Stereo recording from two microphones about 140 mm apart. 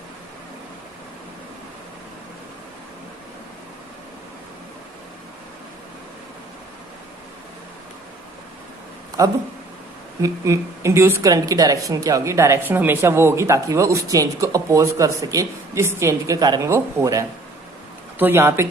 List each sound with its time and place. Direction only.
10.2 s a woman's voice: 20° right (ahead or behind)